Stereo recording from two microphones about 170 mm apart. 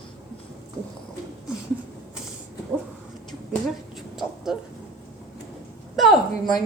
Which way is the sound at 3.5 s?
Centre (ahead or behind).